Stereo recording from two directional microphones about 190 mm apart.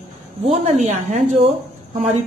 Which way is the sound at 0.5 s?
35° right (ahead or behind).